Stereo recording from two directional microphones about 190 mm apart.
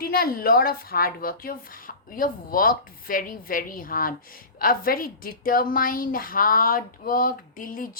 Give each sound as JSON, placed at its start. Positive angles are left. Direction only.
{"t": 0.0, "sound": "a woman's voice", "side_deg": 50}